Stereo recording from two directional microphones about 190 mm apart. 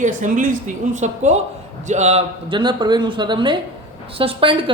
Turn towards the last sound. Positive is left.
turn(degrees=-25)  # may be behind; listen again after turning